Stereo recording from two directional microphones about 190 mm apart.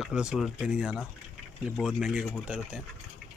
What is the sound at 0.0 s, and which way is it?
Speech, 5° right (ahead or behind).